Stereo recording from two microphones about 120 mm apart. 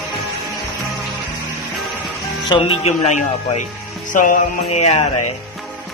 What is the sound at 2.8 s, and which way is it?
Speech, 70° left (ahead or behind).